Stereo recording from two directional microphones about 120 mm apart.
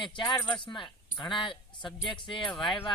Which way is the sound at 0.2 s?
40° left (ahead or behind).